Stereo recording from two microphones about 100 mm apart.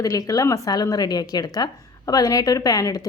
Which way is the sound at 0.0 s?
35° left (ahead or behind).